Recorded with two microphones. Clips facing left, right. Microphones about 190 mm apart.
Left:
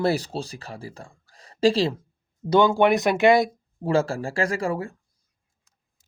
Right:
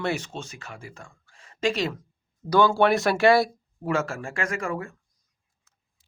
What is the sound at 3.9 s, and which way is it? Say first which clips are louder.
Speech: left 4 dB; 30° left (ahead or behind).